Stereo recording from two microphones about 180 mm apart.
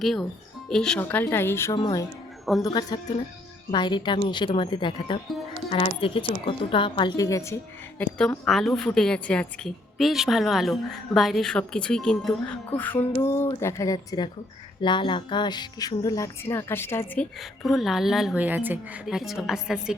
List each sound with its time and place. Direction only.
0.0 s a woman's voice: centre (ahead or behind)
17.4 s a woman's voice: centre (ahead or behind)